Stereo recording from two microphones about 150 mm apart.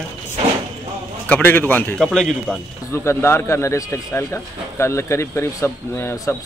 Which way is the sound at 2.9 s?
15° left (ahead or behind).